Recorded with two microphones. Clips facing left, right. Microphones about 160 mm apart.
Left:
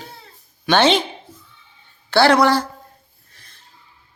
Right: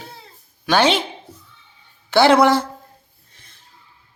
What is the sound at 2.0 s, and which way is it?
Speech, 20° right (ahead or behind).